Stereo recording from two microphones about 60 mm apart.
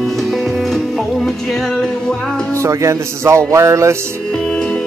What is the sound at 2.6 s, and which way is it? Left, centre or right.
Speech, right.